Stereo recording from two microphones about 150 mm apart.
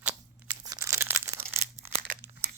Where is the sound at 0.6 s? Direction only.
20° right (ahead or behind).